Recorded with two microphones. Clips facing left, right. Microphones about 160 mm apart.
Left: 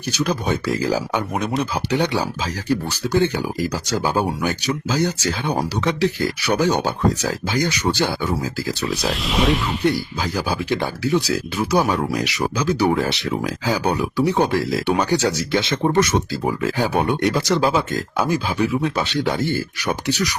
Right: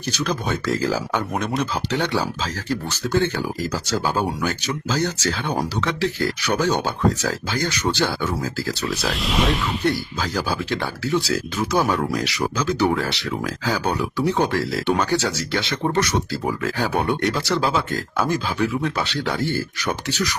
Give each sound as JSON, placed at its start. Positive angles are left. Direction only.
{"t": 0.1, "sound": "speech", "side_deg": 10}
{"t": 9.0, "sound": "speech", "side_deg": 0}
{"t": 9.8, "sound": "speech", "side_deg": 10}